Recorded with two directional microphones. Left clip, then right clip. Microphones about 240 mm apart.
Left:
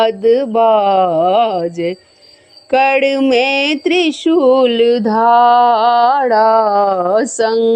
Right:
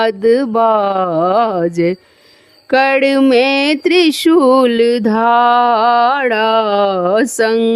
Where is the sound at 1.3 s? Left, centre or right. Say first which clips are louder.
Left 1 dB; right.